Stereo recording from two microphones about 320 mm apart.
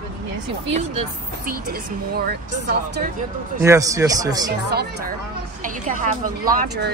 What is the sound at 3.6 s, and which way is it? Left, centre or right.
Speech, centre.